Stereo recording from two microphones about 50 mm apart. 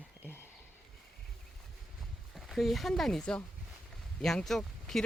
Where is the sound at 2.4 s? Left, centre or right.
Centre.